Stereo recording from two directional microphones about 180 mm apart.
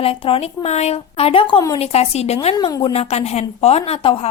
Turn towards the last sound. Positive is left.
turn(degrees=30)  # may be behind; listen again after turning